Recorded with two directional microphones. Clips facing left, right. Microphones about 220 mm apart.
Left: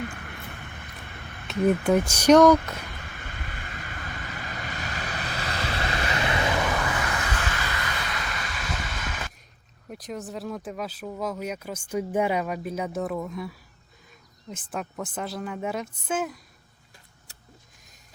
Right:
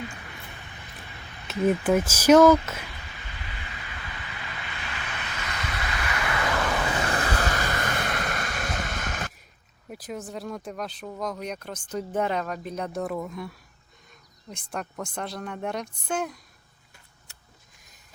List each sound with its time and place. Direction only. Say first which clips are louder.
0.0 s a sound: left 3 dB; 55° left (ahead or behind)
1.5 s speech: left 1 dB; centre (ahead or behind)
3.2 s vehicle: left 2 dB; 50° left (ahead or behind); by 6.7 s 20° left (ahead or behind)
7.0 s vehicle: right 4 dB; 35° right (ahead or behind)
9.9 s speech: left 1 dB; centre (ahead or behind)